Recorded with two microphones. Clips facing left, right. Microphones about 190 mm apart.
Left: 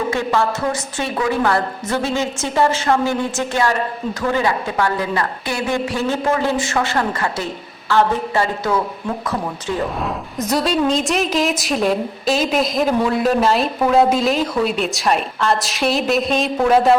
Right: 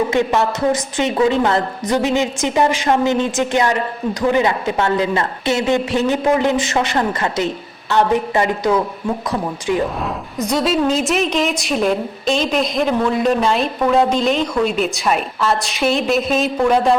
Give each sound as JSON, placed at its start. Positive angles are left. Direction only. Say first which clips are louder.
{"t": 0.1, "sound": "a woman's voice", "louder": "right 2 dB", "side_deg": -20}
{"t": 10.3, "sound": "a woman's voice", "louder": "right 1 dB", "side_deg": 0}